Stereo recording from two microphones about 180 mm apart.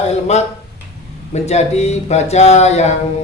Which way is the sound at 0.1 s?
40° left (ahead or behind).